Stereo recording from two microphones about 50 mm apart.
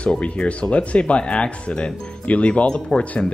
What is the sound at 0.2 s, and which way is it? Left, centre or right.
Speech, left.